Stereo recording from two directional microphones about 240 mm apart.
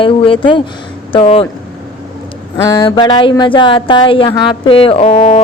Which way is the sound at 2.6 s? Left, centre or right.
Centre.